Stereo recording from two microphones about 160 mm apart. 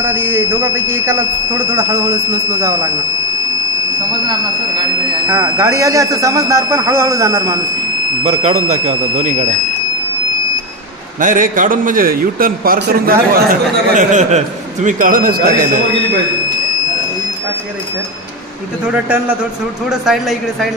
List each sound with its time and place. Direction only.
0.0 s speech: 15° right (ahead or behind)
5.3 s speech: 15° right (ahead or behind)
8.2 s speech: 45° right (ahead or behind)
11.1 s a man's voice: 55° right (ahead or behind)
19.0 s speech: 10° right (ahead or behind)